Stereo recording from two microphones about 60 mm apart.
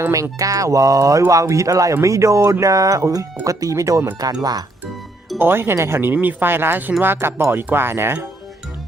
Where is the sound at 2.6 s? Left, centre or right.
Right.